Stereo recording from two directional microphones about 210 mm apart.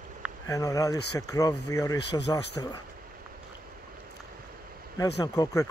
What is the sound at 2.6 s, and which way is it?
Speech, 15° left (ahead or behind).